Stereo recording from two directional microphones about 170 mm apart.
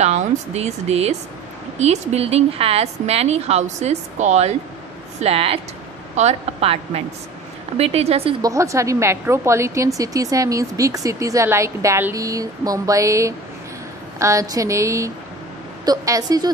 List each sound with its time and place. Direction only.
0.0 s a woman's voice: 40° right (ahead or behind)
8.4 s a woman's voice: 20° right (ahead or behind)